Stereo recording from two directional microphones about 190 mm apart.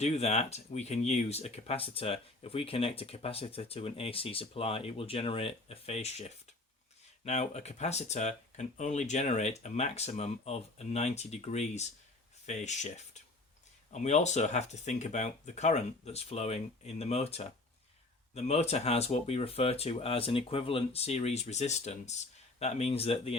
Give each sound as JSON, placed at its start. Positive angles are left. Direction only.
{"t": 0.0, "sound": "speech", "side_deg": 35}